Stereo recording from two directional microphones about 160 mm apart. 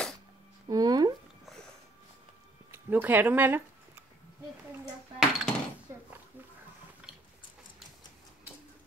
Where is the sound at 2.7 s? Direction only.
10° right (ahead or behind).